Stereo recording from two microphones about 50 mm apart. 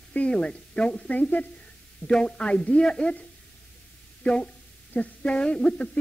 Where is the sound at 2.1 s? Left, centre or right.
Centre.